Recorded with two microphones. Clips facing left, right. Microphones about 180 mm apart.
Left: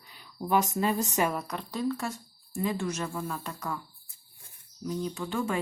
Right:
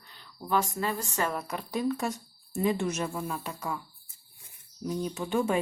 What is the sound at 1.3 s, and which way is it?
Speech, 5° right (ahead or behind).